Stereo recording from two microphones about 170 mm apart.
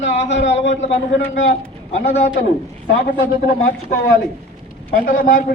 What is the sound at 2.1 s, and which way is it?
Speech, 40° left (ahead or behind).